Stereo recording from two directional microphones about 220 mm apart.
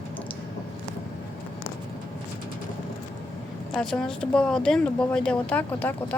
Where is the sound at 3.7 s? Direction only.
Centre (ahead or behind).